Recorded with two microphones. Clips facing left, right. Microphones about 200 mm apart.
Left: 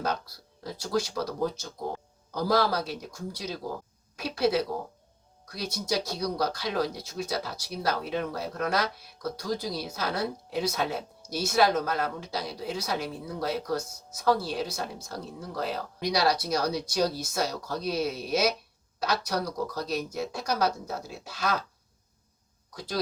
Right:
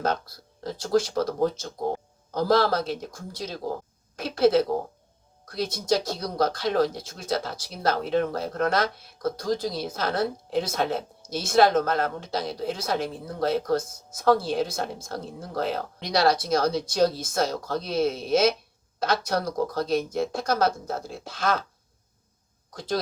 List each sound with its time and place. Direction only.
0.0 s a woman's voice: 50° right (ahead or behind)